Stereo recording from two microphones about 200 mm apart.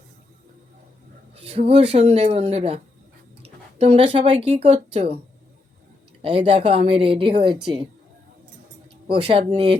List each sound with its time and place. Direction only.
1.5 s speech: 30° right (ahead or behind)
6.2 s speech: 25° right (ahead or behind)
9.0 s speech: 25° right (ahead or behind)